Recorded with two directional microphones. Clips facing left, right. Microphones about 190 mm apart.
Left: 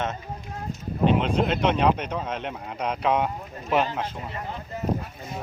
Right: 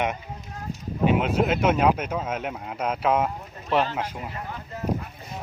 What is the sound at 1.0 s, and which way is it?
Speech, 5° right (ahead or behind).